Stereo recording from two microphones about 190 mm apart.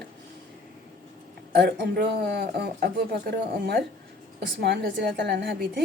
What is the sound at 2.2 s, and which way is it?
A woman's voice, 60° right (ahead or behind).